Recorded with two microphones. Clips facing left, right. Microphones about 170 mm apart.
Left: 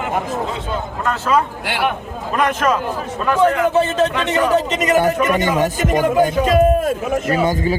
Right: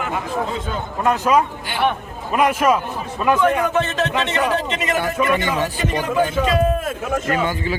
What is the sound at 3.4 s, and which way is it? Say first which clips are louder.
A man's voice: left 8 dB; 35° left (ahead or behind).